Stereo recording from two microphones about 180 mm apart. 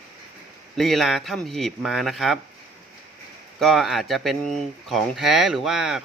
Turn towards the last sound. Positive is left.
turn(degrees=-5)  # may be behind; listen again after turning